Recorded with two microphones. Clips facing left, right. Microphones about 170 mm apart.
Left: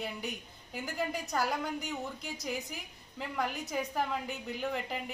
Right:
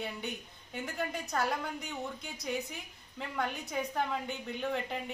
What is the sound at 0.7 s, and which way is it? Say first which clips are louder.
A woman's voice: left 1 dB; centre (ahead or behind).